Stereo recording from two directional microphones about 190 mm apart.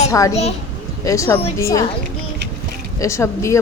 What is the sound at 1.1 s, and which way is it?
Speech, 15° left (ahead or behind).